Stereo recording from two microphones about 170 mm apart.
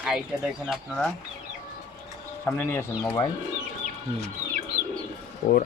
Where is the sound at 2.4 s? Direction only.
10° left (ahead or behind).